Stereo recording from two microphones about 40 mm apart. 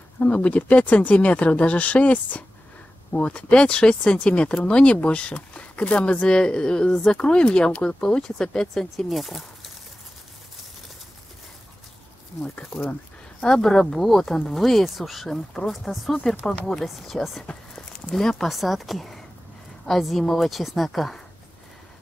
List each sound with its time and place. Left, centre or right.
0.2 s speech: left; by 8.8 s centre
8.9 s a woman's voice: centre
12.6 s speech: left
13.4 s a woman's voice: centre
16.8 s a woman's voice: centre
17.7 s walk: centre
18.4 s a woman's voice: centre